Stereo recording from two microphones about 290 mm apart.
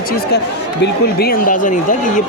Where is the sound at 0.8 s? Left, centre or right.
Left.